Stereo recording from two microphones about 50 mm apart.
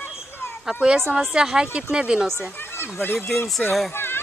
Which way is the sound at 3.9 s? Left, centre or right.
Left.